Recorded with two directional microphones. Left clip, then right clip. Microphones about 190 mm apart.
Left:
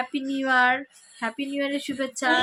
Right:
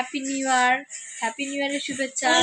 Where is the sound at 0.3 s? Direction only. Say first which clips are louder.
Even; 15° left (ahead or behind).